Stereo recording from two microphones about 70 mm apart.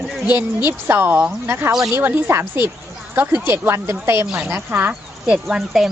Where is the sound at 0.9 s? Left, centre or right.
Right.